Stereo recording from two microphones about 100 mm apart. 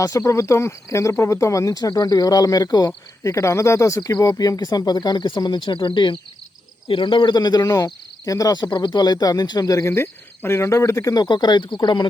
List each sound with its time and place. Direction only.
0.0 s speech: 35° left (ahead or behind)
3.2 s speech: 30° left (ahead or behind)
9.9 s speech: 25° left (ahead or behind); by 12.0 s 50° left (ahead or behind)